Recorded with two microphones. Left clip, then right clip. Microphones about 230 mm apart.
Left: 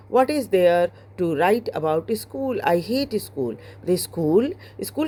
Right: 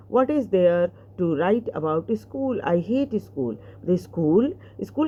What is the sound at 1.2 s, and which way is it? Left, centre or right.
Speech, left.